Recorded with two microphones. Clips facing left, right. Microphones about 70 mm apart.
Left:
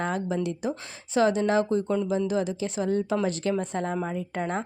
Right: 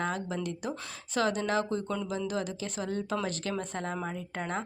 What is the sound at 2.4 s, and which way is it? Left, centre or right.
Speech, right.